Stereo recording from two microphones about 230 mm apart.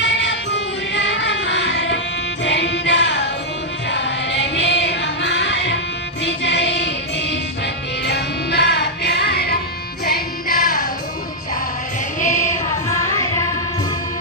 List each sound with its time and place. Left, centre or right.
0.0 s music: left
12.2 s music: left